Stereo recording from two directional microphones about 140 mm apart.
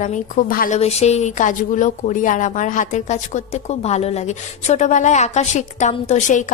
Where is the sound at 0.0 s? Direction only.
65° left (ahead or behind).